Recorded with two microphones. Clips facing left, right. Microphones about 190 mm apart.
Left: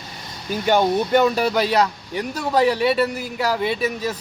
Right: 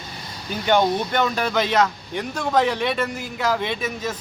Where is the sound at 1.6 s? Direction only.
35° left (ahead or behind).